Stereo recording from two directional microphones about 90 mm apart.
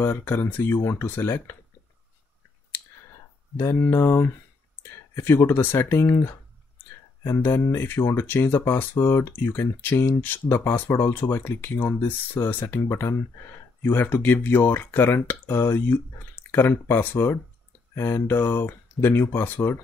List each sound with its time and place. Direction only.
0.0 s speech: 20° left (ahead or behind)
3.5 s speech: 25° left (ahead or behind)
5.3 s speech: 30° left (ahead or behind)
7.3 s speech: 25° left (ahead or behind)